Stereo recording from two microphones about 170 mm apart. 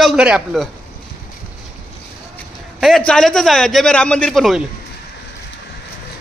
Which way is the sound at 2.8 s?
5° left (ahead or behind).